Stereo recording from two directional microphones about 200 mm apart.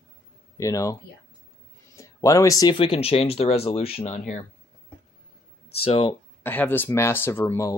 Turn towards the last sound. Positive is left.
turn(degrees=15)  # may be behind; listen again after turning